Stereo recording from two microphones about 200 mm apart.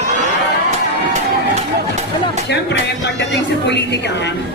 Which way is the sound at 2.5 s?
60° left (ahead or behind).